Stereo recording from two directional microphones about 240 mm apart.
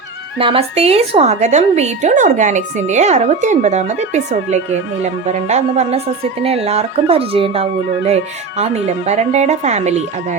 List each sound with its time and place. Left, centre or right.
0.3 s a woman's voice: right